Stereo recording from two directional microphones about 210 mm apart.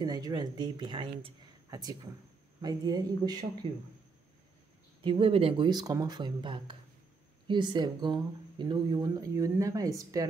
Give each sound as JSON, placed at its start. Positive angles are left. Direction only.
{"t": 0.0, "sound": "speech", "side_deg": -20}
{"t": 5.0, "sound": "speech", "side_deg": -25}